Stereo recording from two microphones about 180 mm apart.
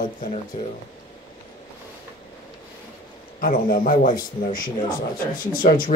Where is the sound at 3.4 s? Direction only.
50° left (ahead or behind).